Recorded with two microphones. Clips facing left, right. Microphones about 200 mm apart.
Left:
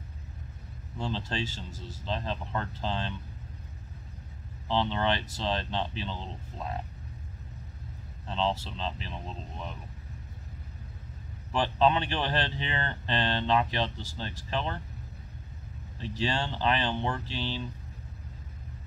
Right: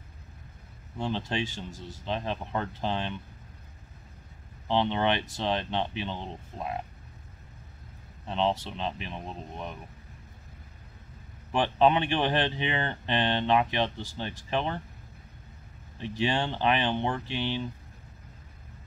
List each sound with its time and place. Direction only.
0.9 s speech: 15° right (ahead or behind)
4.6 s speech: 15° right (ahead or behind)
8.3 s speech: 15° right (ahead or behind)
11.5 s speech: 15° right (ahead or behind)
16.0 s speech: 15° right (ahead or behind)